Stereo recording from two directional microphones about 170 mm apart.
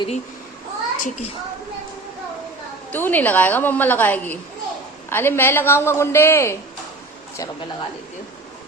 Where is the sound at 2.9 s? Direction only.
10° left (ahead or behind).